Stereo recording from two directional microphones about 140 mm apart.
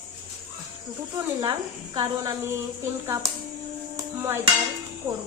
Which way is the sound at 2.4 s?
20° right (ahead or behind).